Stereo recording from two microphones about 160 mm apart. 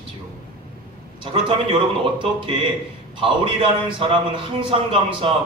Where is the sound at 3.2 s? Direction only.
30° right (ahead or behind).